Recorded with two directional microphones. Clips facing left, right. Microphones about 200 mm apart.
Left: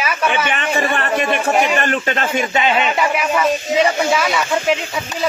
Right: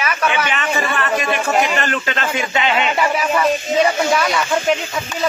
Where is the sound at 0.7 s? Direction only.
35° left (ahead or behind).